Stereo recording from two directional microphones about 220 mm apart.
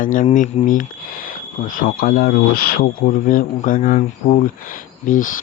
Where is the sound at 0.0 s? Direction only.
35° left (ahead or behind).